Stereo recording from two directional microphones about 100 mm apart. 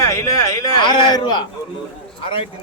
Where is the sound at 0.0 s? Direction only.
30° left (ahead or behind).